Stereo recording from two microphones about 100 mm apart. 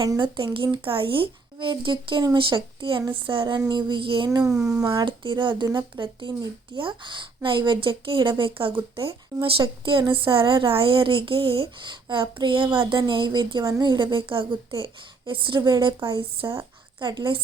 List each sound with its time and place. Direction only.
0.2 s a woman's voice: 55° right (ahead or behind)
4.3 s a child's voice: 35° right (ahead or behind)
4.5 s speech: 5° right (ahead or behind)
4.9 s a woman's voice: 50° right (ahead or behind)
17.0 s speech: 50° right (ahead or behind)